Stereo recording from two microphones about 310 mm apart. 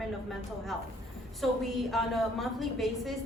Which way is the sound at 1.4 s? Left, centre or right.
Centre.